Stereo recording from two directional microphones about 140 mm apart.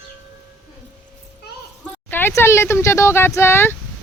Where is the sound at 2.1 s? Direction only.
15° left (ahead or behind).